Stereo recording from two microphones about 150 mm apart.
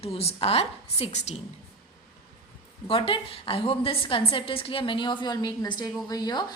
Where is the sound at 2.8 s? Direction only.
35° left (ahead or behind).